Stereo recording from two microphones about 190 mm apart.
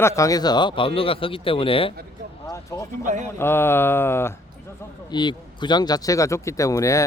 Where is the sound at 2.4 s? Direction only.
15° left (ahead or behind).